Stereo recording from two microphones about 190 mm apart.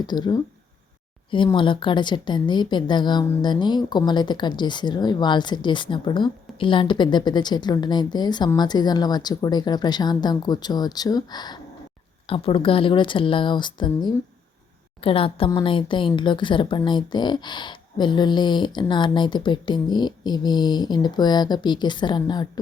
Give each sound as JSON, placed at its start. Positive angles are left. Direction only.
{"t": 0.0, "sound": "a woman's voice", "side_deg": 20}